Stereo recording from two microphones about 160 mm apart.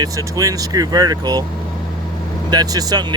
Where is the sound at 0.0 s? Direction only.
20° right (ahead or behind).